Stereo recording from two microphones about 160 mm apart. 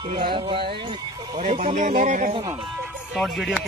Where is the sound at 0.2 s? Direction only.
30° right (ahead or behind); by 2.3 s 50° right (ahead or behind).